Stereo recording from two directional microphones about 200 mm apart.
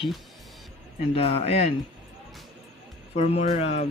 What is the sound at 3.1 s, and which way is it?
Speech, 30° left (ahead or behind).